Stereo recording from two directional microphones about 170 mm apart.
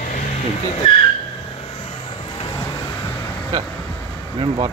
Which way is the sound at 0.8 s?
30° left (ahead or behind).